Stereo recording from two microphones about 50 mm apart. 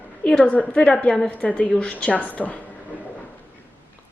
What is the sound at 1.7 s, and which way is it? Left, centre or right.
Speech, centre.